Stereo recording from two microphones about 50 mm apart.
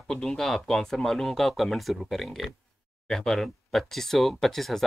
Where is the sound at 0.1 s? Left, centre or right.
Centre.